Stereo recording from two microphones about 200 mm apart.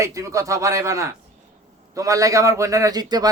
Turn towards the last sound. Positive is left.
turn(degrees=-20)  # may be behind; listen again after turning